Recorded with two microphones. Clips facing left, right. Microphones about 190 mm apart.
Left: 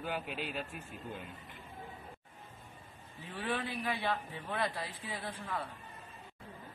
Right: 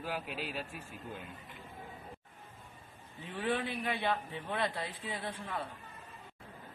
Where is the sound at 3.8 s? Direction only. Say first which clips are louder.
Right 1 dB; 25° right (ahead or behind).